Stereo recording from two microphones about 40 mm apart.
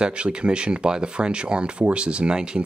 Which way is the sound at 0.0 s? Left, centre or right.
Right.